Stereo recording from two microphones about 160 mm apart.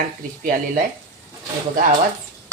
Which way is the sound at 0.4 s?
60° right (ahead or behind).